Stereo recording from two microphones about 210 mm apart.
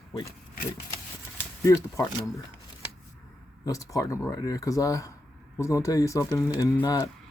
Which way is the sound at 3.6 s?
15° left (ahead or behind).